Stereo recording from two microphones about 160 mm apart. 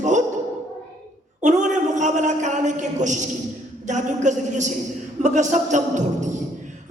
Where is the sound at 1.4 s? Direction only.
50° right (ahead or behind).